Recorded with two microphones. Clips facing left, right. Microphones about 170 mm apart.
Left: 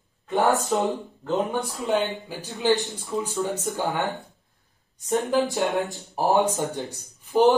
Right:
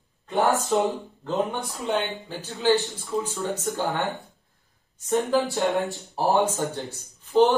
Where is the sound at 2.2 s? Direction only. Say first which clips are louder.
Even; 15° left (ahead or behind).